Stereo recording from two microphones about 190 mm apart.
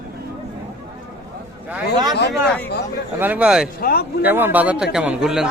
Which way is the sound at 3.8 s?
55° left (ahead or behind).